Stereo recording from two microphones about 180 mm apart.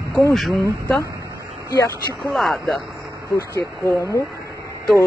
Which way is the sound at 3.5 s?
15° left (ahead or behind).